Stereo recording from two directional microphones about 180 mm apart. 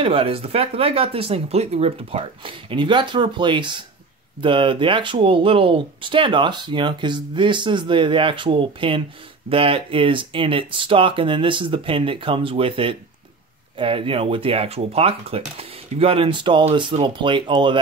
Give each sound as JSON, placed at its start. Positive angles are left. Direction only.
{"t": 0.0, "sound": "speech", "side_deg": -30}